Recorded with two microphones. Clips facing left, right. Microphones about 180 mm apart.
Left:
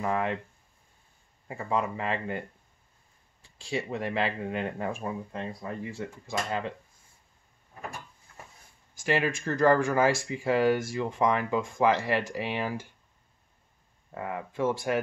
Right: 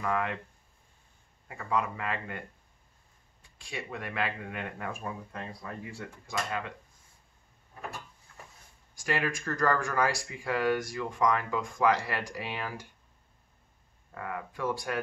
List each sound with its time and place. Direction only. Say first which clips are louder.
0.0 s speech: left 3 dB; 25° left (ahead or behind)
1.5 s speech: left 2 dB; 30° left (ahead or behind)
3.4 s speech: left 8 dB; 30° left (ahead or behind)
8.9 s speech: left 4 dB; 25° left (ahead or behind)
14.1 s speech: left 4 dB; 25° left (ahead or behind)